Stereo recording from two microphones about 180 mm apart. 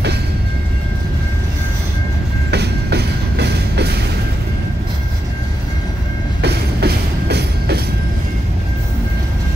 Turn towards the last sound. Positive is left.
turn(degrees=-65)  # may be behind; listen again after turning